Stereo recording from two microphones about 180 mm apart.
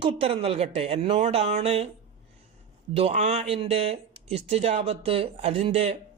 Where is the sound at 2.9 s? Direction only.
35° right (ahead or behind).